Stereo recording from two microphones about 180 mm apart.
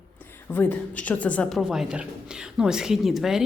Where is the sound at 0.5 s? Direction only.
10° left (ahead or behind).